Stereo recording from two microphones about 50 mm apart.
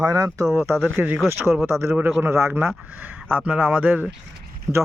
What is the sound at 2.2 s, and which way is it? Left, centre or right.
Speech, right.